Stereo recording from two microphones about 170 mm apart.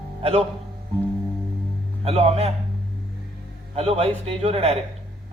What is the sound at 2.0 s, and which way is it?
Speech, 35° right (ahead or behind).